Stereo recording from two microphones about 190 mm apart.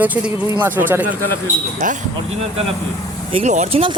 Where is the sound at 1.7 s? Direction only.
45° right (ahead or behind).